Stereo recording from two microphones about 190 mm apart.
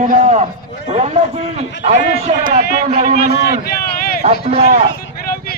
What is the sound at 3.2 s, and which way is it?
Speech, 55° left (ahead or behind).